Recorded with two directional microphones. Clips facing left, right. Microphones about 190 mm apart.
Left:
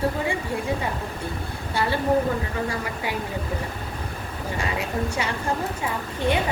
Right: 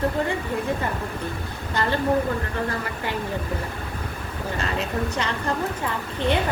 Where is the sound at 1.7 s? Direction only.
10° left (ahead or behind).